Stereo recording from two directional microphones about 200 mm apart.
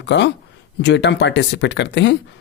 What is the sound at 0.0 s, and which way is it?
Speech, 60° left (ahead or behind).